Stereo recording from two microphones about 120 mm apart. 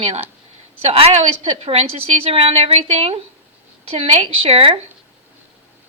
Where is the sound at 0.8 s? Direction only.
55° right (ahead or behind).